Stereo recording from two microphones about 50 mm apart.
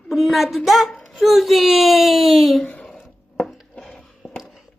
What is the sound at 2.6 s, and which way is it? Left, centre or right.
Speech, left.